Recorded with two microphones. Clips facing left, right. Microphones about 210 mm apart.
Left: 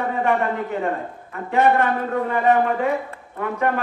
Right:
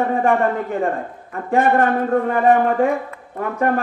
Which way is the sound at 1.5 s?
45° right (ahead or behind).